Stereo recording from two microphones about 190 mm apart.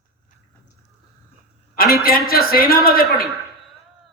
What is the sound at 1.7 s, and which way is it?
Speech, 50° left (ahead or behind).